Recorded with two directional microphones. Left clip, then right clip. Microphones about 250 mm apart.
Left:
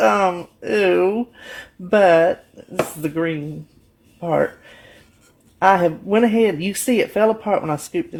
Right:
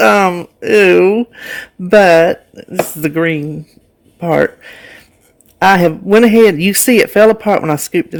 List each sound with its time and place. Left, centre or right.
0.0 s speech: right
5.5 s speech: right